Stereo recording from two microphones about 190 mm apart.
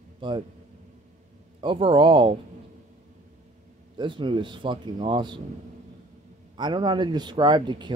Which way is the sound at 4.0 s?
25° right (ahead or behind).